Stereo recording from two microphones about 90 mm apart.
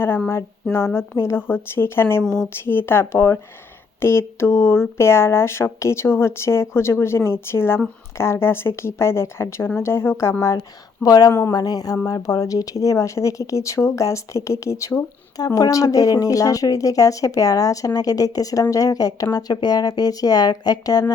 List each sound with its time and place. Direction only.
0.7 s speech: 30° left (ahead or behind)
10.6 s speech: 45° left (ahead or behind)
11.5 s speech: 45° left (ahead or behind)